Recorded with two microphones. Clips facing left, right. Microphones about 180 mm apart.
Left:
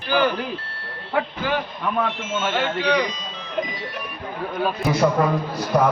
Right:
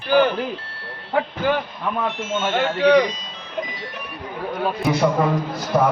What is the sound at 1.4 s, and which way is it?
Speech, 50° right (ahead or behind).